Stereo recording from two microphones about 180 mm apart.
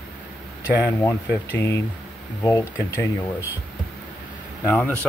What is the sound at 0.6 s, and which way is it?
Speech, 10° right (ahead or behind).